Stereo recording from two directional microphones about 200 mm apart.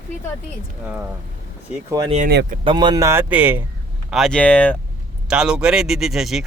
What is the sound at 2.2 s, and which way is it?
Speech, 50° right (ahead or behind).